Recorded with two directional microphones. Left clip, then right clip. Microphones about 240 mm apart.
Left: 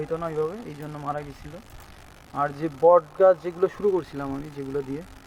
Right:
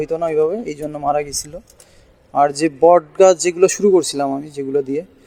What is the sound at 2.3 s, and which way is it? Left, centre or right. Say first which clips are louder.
Speech: right 12 dB; right.